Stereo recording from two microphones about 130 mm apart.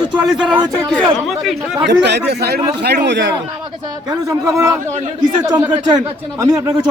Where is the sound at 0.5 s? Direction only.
35° right (ahead or behind).